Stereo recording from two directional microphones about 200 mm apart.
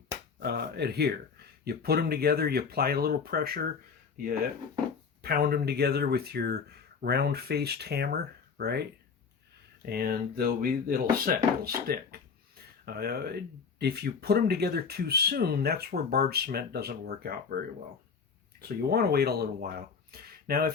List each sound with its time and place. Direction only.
0.3 s speech: 55° right (ahead or behind)
5.2 s speech: 50° right (ahead or behind)
18.8 s speech: 50° right (ahead or behind)